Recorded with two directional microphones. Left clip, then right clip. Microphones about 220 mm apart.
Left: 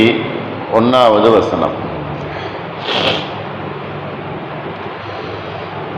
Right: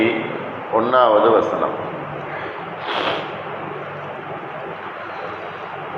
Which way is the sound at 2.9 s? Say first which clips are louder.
Left 6 dB; 45° left (ahead or behind).